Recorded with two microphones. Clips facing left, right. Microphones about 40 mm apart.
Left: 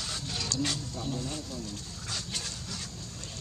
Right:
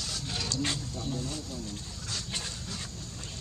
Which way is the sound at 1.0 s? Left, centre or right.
Centre.